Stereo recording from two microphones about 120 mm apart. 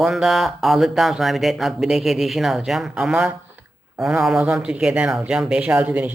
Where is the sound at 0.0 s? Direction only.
Centre (ahead or behind).